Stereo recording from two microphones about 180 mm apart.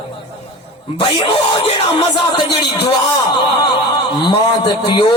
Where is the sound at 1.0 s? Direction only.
25° left (ahead or behind).